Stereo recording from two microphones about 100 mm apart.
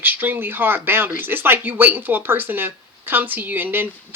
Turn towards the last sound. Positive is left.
turn(degrees=-20)  # may be behind; listen again after turning